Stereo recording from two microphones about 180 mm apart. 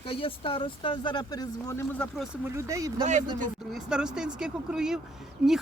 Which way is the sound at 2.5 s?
15° right (ahead or behind).